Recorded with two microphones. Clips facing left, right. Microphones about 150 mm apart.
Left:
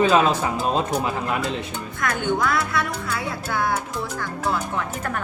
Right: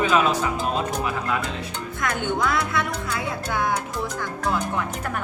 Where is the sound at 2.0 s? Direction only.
20° right (ahead or behind).